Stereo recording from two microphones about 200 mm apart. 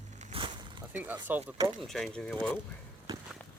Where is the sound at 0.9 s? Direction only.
10° right (ahead or behind).